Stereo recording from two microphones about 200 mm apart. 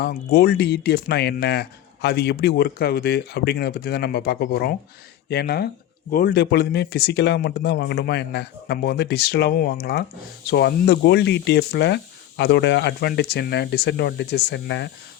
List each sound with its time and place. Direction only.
0.0 s speech: 50° left (ahead or behind)